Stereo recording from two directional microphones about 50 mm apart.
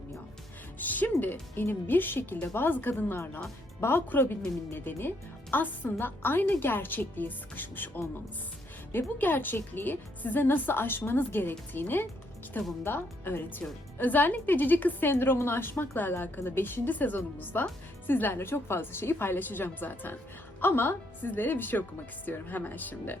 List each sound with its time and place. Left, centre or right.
0.8 s a woman's voice: left
1.2 s a woman's voice: left
3.8 s a woman's voice: left
15.7 s a woman's voice: left